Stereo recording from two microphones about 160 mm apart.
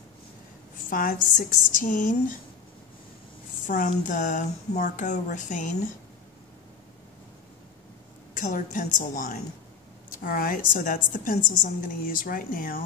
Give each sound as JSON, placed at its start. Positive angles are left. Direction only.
{"t": 0.7, "sound": "a woman's voice", "side_deg": 60}
{"t": 3.6, "sound": "speech", "side_deg": 55}
{"t": 8.4, "sound": "a woman's voice", "side_deg": 55}